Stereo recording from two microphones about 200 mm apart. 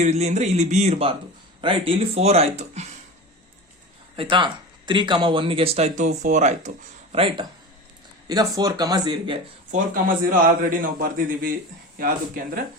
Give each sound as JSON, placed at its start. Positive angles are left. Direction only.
{"t": 0.0, "sound": "speech", "side_deg": -35}
{"t": 4.2, "sound": "speech", "side_deg": -25}
{"t": 9.7, "sound": "a man's voice", "side_deg": -45}